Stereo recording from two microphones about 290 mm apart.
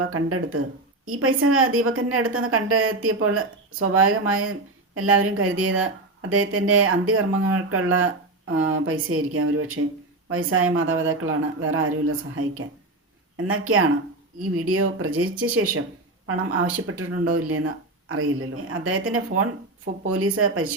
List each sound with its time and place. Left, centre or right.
0.1 s speech: right